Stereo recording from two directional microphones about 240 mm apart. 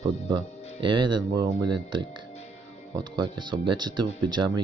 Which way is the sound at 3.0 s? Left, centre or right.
Centre.